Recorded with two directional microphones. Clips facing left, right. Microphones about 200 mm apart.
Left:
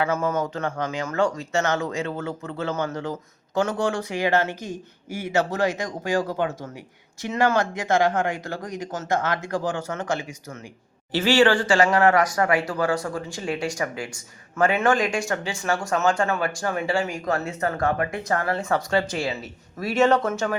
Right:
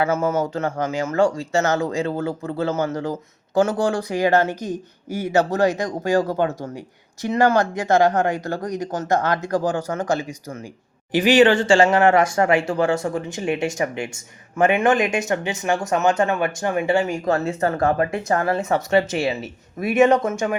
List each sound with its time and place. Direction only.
0.1 s speech: 25° right (ahead or behind)
11.1 s speech: 15° right (ahead or behind)